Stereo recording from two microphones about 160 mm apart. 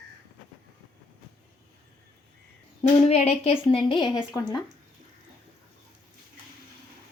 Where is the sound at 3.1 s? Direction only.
40° left (ahead or behind).